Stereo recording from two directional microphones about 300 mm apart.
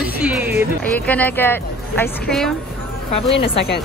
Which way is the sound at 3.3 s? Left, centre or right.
Left.